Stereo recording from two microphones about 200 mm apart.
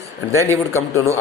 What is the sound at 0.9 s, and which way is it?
Speech, 15° left (ahead or behind).